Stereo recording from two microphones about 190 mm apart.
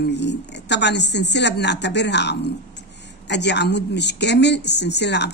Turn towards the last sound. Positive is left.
turn(degrees=65)  # may be behind; listen again after turning